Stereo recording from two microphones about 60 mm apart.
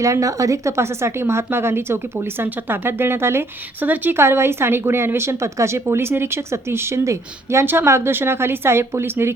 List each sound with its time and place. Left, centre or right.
0.0 s speech: right
3.8 s speech: right
7.6 s speech: right